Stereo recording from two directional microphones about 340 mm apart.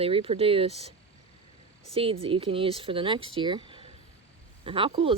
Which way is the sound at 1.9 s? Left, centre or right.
Centre.